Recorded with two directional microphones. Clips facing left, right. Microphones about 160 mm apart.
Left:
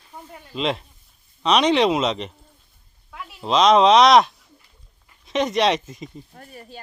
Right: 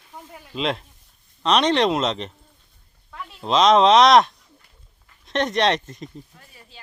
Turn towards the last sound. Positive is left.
turn(degrees=45)  # may be behind; listen again after turning